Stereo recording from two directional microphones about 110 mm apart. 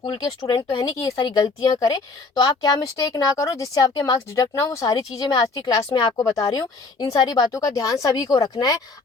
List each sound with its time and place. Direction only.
0.0 s speech: 45° left (ahead or behind)